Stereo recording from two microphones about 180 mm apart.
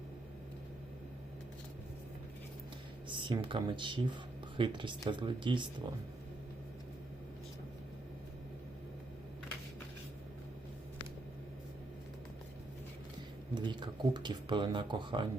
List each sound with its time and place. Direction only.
3.1 s a sound: 25° right (ahead or behind)
3.4 s speech: 25° right (ahead or behind)
13.5 s speech: 25° right (ahead or behind)